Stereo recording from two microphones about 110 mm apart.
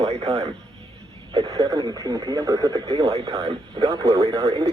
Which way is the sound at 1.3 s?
30° right (ahead or behind).